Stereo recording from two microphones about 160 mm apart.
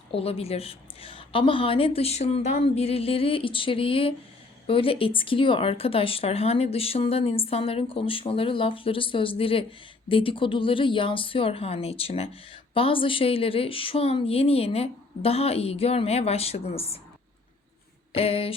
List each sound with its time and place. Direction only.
0.1 s speech: 35° left (ahead or behind)
18.1 s speech: 40° left (ahead or behind)